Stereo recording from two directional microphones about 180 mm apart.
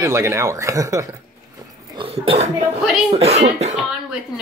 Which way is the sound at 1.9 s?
30° right (ahead or behind).